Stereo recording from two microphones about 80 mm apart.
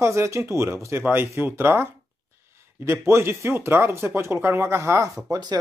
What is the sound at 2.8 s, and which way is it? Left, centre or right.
Speech, right.